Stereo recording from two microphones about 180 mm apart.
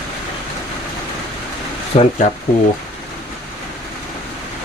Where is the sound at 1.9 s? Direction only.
35° left (ahead or behind).